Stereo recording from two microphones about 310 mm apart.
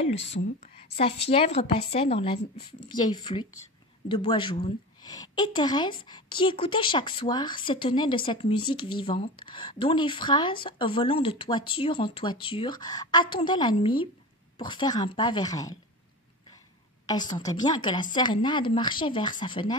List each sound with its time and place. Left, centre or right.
0.2 s a woman's voice: centre
17.0 s a woman's voice: centre